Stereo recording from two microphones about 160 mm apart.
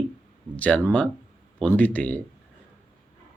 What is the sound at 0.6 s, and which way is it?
Speech, 10° left (ahead or behind).